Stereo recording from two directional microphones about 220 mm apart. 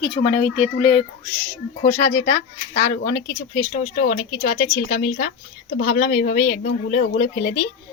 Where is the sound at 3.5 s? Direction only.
40° left (ahead or behind).